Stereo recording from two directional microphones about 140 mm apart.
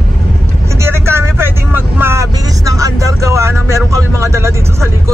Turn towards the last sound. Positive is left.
turn(degrees=-20)  # may be behind; listen again after turning